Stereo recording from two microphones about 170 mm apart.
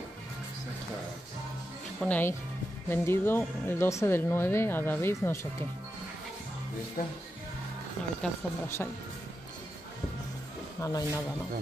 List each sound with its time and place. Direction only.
2.0 s speech: 10° left (ahead or behind)
7.0 s speech: 60° left (ahead or behind)
8.2 s speech: 5° left (ahead or behind)
10.8 s speech: 20° left (ahead or behind)